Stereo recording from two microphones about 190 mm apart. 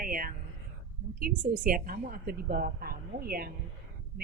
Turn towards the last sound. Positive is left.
turn(degrees=-50)  # may be behind; listen again after turning